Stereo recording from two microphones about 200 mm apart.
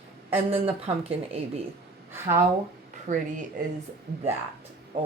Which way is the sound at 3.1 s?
40° right (ahead or behind).